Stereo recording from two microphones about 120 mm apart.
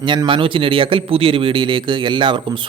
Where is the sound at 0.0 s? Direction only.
40° right (ahead or behind).